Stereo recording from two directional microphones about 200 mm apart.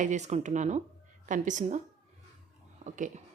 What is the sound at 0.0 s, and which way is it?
A woman's voice, 35° right (ahead or behind).